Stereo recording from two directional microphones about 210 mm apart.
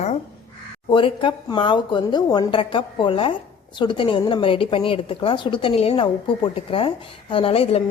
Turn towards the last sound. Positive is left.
turn(degrees=25)  # may be behind; listen again after turning